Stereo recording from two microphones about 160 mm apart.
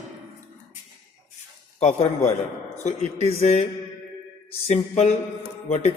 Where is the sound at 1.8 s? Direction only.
45° left (ahead or behind).